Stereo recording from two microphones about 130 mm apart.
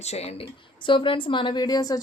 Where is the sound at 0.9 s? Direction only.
40° left (ahead or behind).